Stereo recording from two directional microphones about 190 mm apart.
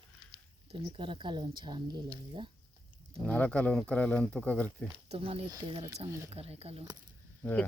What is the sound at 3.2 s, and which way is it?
Speech, 5° left (ahead or behind).